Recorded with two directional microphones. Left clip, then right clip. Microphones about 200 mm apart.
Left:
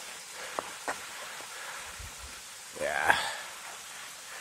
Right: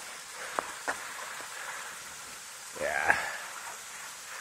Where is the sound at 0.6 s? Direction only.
10° right (ahead or behind).